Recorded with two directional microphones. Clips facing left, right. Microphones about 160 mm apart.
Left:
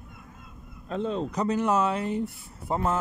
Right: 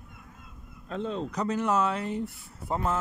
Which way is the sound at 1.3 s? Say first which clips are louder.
Left 2 dB; 20° left (ahead or behind).